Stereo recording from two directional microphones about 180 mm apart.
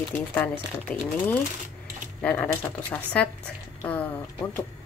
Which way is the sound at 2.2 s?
10° left (ahead or behind).